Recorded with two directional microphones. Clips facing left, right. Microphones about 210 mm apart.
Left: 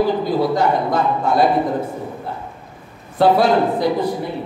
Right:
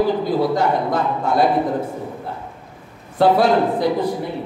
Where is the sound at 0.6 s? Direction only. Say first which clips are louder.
Left 1 dB; 50° right (ahead or behind).